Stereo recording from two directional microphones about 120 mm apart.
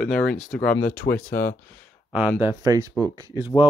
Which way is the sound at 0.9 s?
15° left (ahead or behind).